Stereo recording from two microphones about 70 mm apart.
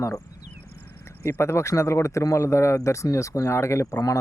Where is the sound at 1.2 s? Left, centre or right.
Left.